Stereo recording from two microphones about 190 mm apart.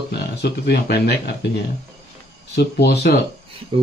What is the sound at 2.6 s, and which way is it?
Speech, 60° left (ahead or behind).